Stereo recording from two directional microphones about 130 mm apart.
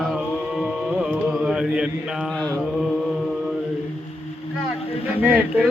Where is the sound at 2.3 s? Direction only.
10° left (ahead or behind).